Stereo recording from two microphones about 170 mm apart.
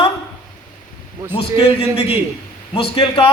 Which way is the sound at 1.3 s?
35° left (ahead or behind).